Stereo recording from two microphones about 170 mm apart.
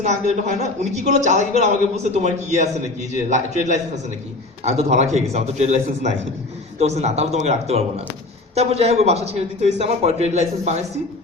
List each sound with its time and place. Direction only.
0.0 s a man's voice: 45° right (ahead or behind)
4.6 s a man's voice: 40° right (ahead or behind)